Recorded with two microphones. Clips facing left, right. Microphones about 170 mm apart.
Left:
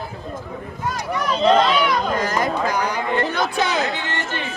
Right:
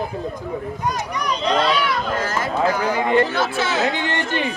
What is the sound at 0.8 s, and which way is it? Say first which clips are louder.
Speech: left 3 dB; 15° right (ahead or behind).